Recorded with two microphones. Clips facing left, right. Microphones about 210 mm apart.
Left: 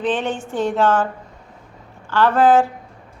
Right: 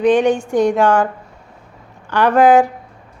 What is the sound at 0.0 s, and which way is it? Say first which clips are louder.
A woman's voice: right 9 dB; 15° right (ahead or behind).